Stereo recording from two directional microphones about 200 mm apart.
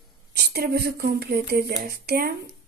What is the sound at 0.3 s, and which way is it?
Speech, 50° right (ahead or behind).